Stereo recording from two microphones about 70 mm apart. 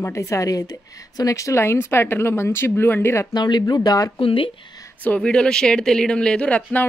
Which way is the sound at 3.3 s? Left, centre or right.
Left.